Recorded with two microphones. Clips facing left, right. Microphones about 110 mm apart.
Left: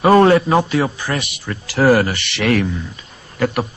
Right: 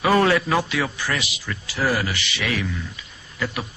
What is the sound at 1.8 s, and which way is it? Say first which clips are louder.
Speech: left 10 dB; 60° left (ahead or behind).